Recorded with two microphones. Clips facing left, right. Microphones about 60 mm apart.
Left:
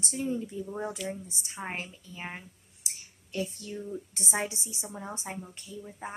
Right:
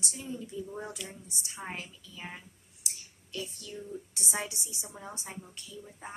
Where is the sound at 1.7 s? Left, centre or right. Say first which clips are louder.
Left 3 dB; left.